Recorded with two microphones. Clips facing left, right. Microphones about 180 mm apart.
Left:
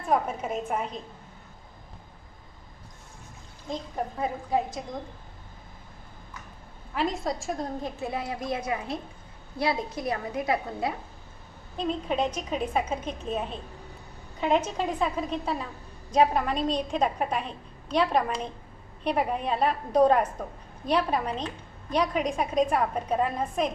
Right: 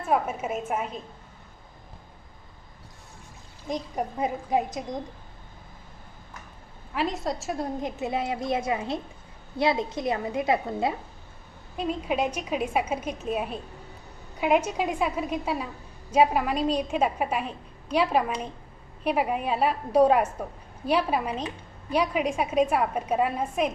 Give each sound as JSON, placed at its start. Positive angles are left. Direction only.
{"t": 0.0, "sound": "a woman's voice", "side_deg": -5}
{"t": 3.6, "sound": "a woman's voice", "side_deg": -15}
{"t": 6.9, "sound": "a woman's voice", "side_deg": 0}
{"t": 11.7, "sound": "a woman's voice", "side_deg": -10}